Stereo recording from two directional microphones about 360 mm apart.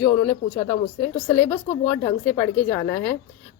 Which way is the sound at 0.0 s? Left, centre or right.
Centre.